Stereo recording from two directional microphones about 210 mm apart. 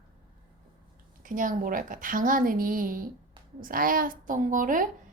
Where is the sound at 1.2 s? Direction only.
40° right (ahead or behind).